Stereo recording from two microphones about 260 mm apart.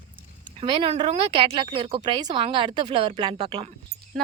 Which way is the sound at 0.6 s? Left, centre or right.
Right.